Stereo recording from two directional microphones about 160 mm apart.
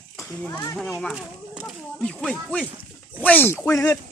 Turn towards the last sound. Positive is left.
turn(degrees=15)  # may be behind; listen again after turning